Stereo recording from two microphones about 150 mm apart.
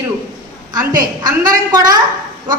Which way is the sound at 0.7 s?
25° right (ahead or behind).